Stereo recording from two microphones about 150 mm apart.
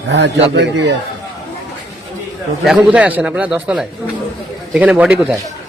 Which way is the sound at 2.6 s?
5° right (ahead or behind).